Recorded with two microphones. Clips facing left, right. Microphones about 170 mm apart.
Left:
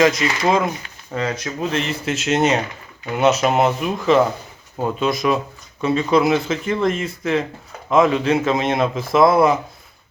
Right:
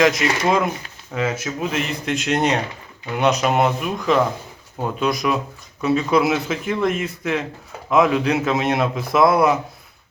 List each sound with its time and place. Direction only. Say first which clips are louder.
0.0 s speech: left 1 dB; centre (ahead or behind)